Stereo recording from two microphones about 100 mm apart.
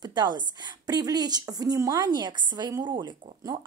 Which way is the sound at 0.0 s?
45° right (ahead or behind).